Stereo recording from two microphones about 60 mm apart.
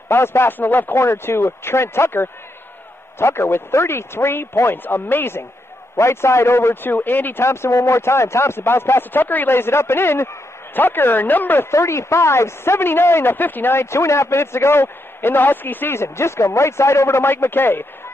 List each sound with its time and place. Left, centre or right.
0.1 s speech: left
0.9 s speech: left
5.9 s speech: left
7.4 s speech: left
11.7 s speech: left